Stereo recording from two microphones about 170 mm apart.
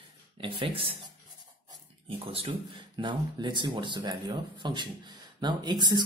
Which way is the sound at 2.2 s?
30° right (ahead or behind).